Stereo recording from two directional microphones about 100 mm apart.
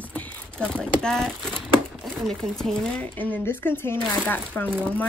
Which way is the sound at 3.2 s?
20° left (ahead or behind).